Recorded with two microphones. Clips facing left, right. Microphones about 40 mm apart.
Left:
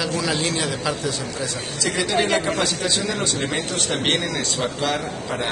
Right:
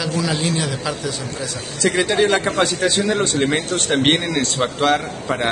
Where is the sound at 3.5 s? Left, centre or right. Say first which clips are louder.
Right 4 dB; right.